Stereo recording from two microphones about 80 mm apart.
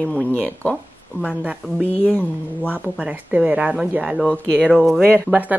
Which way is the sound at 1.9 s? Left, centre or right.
Centre.